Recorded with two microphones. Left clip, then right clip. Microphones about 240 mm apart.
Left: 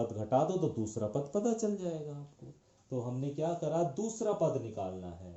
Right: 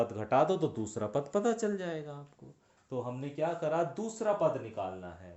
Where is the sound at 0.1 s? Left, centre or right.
Right.